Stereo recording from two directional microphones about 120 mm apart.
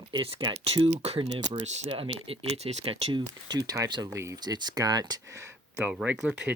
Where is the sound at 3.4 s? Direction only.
35° right (ahead or behind).